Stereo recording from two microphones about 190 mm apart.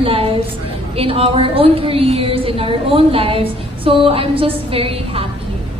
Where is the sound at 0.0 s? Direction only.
30° right (ahead or behind).